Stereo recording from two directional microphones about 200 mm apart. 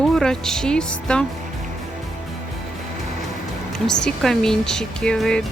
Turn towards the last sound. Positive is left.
turn(degrees=5)  # may be behind; listen again after turning